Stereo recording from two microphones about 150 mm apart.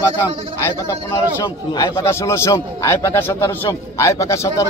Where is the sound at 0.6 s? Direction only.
15° left (ahead or behind).